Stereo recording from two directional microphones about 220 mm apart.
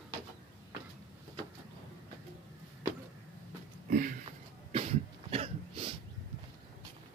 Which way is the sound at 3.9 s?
40° right (ahead or behind).